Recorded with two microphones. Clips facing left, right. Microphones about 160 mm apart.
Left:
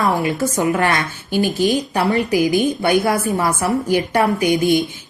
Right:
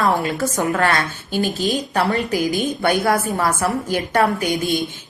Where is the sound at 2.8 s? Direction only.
20° left (ahead or behind).